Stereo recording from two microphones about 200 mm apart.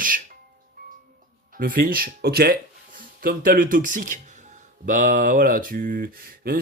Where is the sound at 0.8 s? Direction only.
45° right (ahead or behind).